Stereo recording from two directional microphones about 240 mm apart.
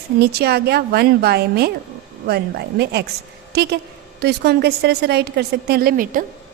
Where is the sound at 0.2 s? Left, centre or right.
Right.